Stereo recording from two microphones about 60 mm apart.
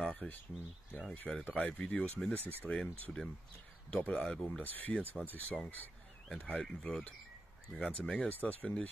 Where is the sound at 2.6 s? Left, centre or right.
Left.